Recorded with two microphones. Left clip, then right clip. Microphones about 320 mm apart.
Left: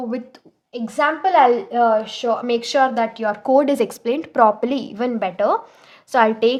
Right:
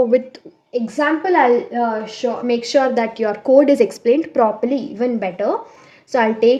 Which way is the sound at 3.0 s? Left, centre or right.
Left.